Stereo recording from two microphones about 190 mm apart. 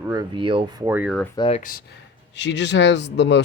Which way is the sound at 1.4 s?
30° left (ahead or behind).